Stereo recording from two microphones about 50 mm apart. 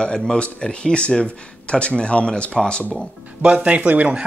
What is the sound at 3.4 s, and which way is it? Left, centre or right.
Speech, right.